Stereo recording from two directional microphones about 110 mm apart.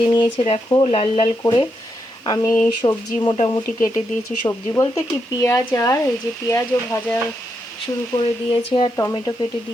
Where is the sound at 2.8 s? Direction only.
40° left (ahead or behind).